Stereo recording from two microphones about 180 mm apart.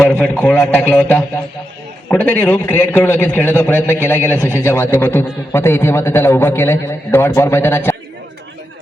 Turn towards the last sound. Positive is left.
turn(degrees=15)  # may be behind; listen again after turning